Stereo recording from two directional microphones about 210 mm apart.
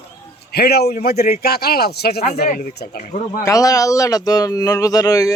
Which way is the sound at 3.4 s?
15° left (ahead or behind).